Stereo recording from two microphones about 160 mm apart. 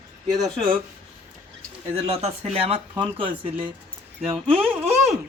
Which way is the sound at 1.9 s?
35° right (ahead or behind).